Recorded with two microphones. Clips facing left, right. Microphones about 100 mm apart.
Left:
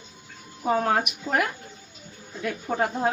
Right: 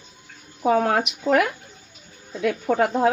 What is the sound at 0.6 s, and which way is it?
Speech, 80° right.